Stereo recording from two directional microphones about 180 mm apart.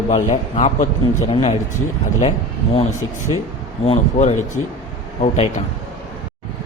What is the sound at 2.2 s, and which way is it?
Speech, 30° left (ahead or behind).